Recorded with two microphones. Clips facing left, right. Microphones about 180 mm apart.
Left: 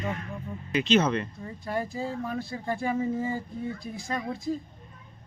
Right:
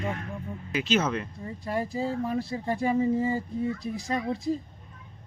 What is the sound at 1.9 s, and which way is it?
Speech, 35° right (ahead or behind).